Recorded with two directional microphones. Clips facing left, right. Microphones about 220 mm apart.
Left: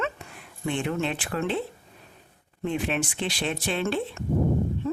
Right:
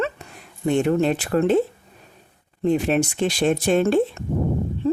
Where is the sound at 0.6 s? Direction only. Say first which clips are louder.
Right 9 dB; 40° right (ahead or behind).